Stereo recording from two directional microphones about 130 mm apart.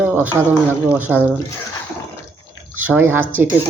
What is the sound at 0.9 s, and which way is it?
Speech, 10° right (ahead or behind).